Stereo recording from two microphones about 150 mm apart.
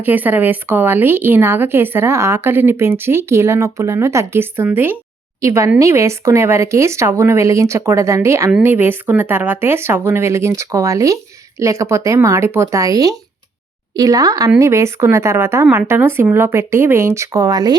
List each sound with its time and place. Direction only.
0.0 s a woman's voice: 10° right (ahead or behind)